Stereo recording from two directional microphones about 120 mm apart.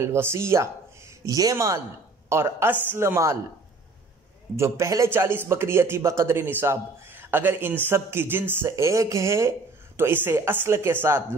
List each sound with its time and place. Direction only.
0.0 s speech: 20° right (ahead or behind)
4.6 s speech: 25° right (ahead or behind)